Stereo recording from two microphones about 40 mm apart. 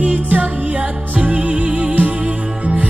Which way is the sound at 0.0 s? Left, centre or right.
Right.